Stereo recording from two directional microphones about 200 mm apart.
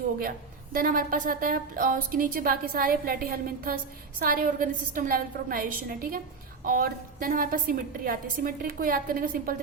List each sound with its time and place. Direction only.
0.2 s a woman's voice: 45° right (ahead or behind)